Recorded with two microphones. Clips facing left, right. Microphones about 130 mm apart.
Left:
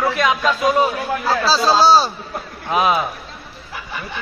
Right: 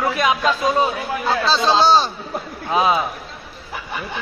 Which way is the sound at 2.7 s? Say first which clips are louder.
Even; 25° right (ahead or behind).